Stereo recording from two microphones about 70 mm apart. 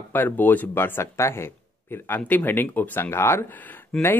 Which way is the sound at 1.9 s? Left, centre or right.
Left.